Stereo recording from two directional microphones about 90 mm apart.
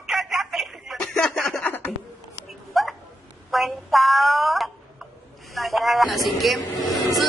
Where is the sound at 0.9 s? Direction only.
10° left (ahead or behind).